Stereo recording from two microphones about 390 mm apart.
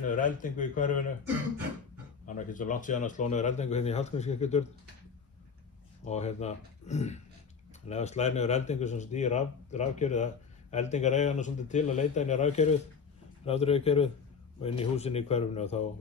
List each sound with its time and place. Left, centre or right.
0.0 s a man's voice: centre
2.2 s speech: centre
6.0 s speech: centre